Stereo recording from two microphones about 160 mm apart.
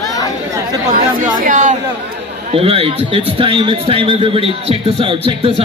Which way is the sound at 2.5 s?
35° right (ahead or behind).